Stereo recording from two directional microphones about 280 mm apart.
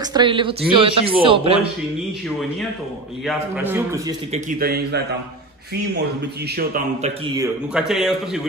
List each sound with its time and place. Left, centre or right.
0.1 s speech: centre
3.3 s a man's voice: centre
4.3 s a man's voice: right
6.5 s a man's voice: right
7.3 s a man's voice: centre